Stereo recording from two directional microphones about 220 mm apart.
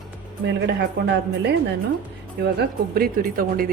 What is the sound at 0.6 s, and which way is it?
A woman's voice, 50° right (ahead or behind).